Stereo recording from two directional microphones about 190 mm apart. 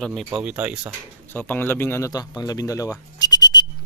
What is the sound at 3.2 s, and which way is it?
Whistle, 20° left (ahead or behind).